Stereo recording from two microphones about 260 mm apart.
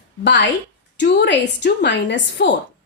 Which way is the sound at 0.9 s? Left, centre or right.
Left.